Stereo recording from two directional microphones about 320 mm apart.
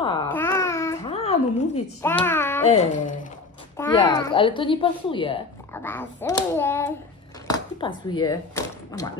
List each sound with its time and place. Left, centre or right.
0.0 s babbling: centre
1.8 s speech: centre
2.7 s speech: centre